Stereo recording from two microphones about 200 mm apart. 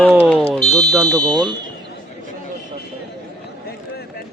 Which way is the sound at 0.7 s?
20° right (ahead or behind).